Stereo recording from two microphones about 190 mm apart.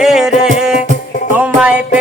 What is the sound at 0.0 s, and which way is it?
Music, centre (ahead or behind).